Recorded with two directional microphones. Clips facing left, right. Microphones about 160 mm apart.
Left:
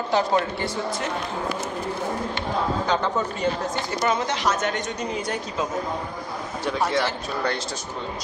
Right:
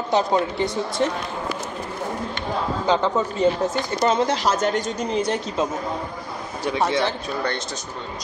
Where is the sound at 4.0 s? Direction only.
35° right (ahead or behind).